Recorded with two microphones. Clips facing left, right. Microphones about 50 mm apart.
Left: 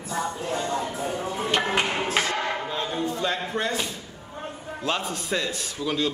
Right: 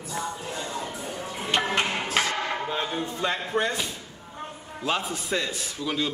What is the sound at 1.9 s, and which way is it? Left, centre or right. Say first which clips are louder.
Music: left 2 dB; left.